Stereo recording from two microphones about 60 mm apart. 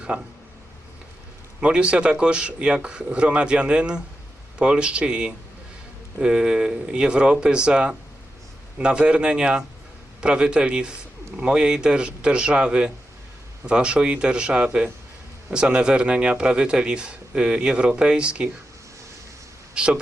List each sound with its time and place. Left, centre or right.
0.1 s a man's voice: centre
1.6 s a man's voice: centre
19.7 s speech: centre